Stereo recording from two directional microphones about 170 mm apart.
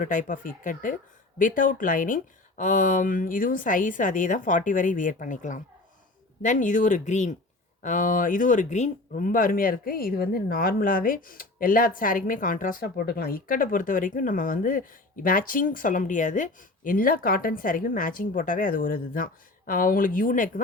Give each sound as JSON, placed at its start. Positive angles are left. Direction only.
{"t": 0.0, "sound": "speech", "side_deg": 50}